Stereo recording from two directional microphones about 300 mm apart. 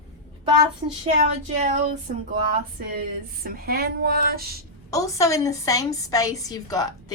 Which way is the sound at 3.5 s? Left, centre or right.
Right.